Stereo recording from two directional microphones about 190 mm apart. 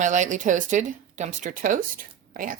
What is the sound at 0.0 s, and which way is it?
Speech, 40° right (ahead or behind).